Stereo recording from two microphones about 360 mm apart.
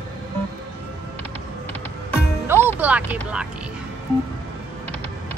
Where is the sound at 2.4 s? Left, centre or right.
Centre.